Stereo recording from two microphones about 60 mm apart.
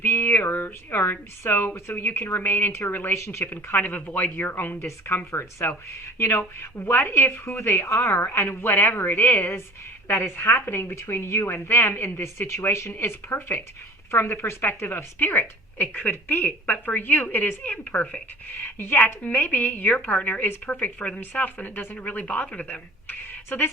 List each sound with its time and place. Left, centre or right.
0.0 s a sound: left
1.1 s a woman's voice: left
3.2 s a woman's voice: left
4.9 s a woman's voice: left
7.9 s a woman's voice: left
8.4 s a woman's voice: left